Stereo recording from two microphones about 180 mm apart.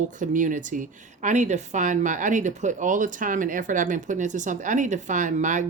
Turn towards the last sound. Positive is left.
turn(degrees=-45)  # may be behind; listen again after turning